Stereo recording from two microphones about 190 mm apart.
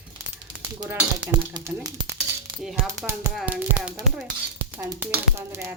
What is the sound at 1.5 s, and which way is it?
Speech, 15° right (ahead or behind).